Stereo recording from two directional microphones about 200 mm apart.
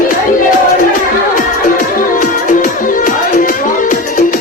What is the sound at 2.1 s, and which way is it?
Music, 40° left (ahead or behind).